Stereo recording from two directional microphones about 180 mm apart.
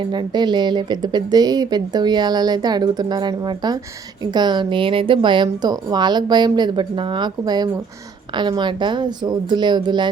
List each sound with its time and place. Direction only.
0.0 s speech: 25° right (ahead or behind)